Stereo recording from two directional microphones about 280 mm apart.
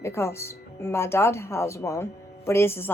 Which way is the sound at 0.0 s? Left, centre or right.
Centre.